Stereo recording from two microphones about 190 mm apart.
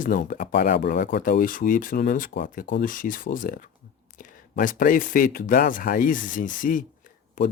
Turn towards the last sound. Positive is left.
turn(degrees=45)  # may be behind; listen again after turning